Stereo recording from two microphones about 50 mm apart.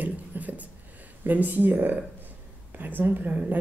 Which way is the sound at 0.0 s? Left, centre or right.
Right.